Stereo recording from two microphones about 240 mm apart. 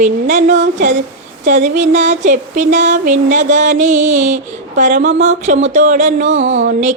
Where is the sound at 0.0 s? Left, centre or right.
Right.